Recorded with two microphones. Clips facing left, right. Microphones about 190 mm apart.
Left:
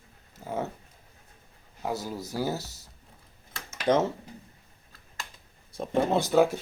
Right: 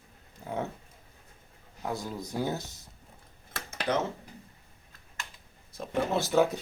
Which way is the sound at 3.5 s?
55° right (ahead or behind).